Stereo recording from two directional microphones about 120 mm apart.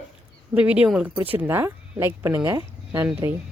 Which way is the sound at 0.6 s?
10° right (ahead or behind).